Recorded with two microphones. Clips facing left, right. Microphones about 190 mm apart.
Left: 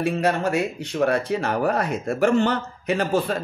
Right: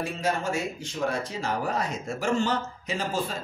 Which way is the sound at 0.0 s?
65° left (ahead or behind).